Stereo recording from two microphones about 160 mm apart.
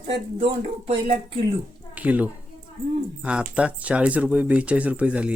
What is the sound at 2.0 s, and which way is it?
Speech, 10° right (ahead or behind).